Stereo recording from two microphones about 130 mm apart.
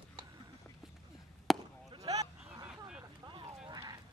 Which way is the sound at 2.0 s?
55° right (ahead or behind).